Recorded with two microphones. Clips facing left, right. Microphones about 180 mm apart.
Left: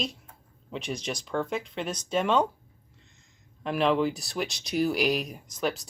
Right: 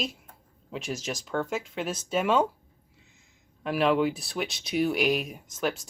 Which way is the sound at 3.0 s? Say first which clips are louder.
Right 2 dB; 5° right (ahead or behind).